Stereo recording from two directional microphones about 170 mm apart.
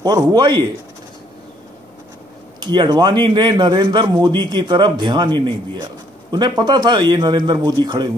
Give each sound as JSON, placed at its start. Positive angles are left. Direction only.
{"t": 0.0, "sound": "a man's voice", "side_deg": -20}
{"t": 2.6, "sound": "a man's voice", "side_deg": -25}